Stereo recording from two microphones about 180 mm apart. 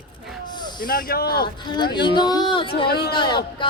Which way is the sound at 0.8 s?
55° left (ahead or behind).